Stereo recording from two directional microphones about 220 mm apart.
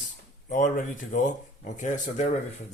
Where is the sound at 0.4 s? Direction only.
35° left (ahead or behind).